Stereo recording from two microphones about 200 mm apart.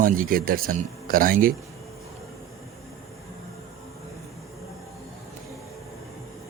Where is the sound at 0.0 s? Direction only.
45° right (ahead or behind).